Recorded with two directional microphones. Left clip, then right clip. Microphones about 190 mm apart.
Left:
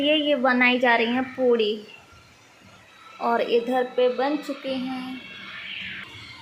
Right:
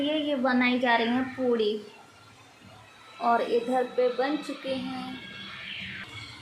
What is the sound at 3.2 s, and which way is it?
A woman's voice, 25° left (ahead or behind).